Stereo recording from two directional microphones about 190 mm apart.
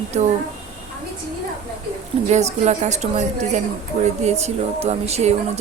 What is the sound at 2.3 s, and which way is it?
Speech, 35° right (ahead or behind).